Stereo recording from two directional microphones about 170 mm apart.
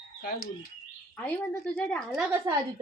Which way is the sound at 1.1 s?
10° left (ahead or behind).